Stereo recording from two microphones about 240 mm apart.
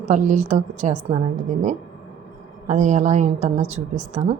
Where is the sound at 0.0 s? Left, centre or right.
Right.